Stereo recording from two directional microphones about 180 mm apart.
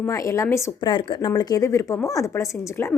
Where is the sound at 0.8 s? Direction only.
25° left (ahead or behind).